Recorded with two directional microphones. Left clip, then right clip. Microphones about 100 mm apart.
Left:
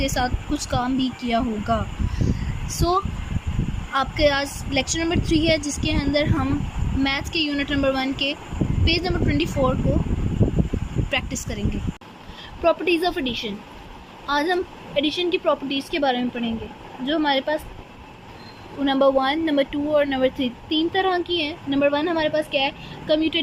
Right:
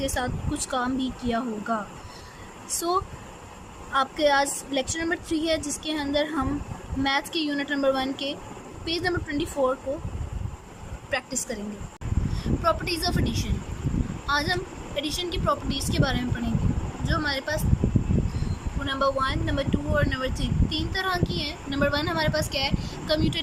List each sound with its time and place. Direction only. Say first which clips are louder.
0.0 s a woman's voice: left 5 dB; 10° left (ahead or behind)
11.1 s speech: left 2 dB; 20° left (ahead or behind)
12.6 s speech: left 6 dB; 30° left (ahead or behind)
18.9 s speech: left 6 dB; 55° left (ahead or behind); by 23.4 s 30° left (ahead or behind)